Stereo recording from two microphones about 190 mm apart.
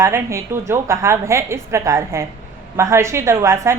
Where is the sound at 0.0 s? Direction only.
15° right (ahead or behind).